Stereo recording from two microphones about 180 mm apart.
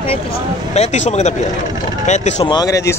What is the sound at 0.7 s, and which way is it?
Speech, 40° left (ahead or behind).